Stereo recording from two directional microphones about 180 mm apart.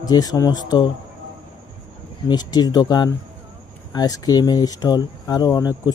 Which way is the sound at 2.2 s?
20° left (ahead or behind).